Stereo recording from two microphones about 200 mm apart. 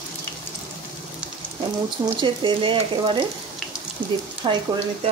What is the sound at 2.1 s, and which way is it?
Speech, 25° right (ahead or behind).